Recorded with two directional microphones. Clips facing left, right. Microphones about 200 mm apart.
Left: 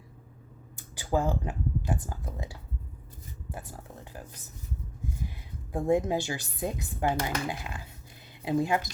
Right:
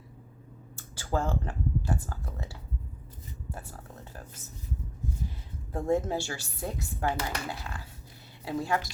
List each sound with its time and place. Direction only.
0.8 s speech: 15° left (ahead or behind)
5.7 s speech: 15° left (ahead or behind)